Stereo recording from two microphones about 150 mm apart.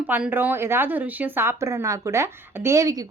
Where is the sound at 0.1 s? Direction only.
10° right (ahead or behind).